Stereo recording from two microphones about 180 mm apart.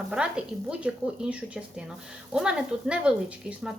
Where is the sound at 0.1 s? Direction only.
5° right (ahead or behind).